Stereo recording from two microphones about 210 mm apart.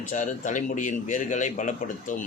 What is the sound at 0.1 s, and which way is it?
A man's voice, 35° left (ahead or behind).